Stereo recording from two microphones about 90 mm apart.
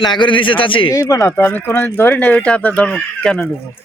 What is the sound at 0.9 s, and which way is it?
Speech, 40° left (ahead or behind).